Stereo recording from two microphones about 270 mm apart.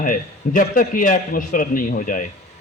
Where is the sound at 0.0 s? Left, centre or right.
Left.